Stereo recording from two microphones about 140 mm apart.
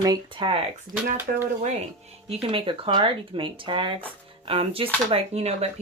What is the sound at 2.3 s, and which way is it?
Speech, 40° right (ahead or behind).